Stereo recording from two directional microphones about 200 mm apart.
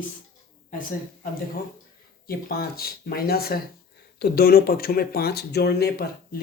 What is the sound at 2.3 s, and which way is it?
Speech, 50° left (ahead or behind).